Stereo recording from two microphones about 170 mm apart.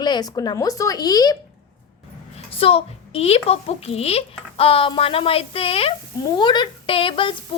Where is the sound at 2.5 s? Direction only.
35° left (ahead or behind).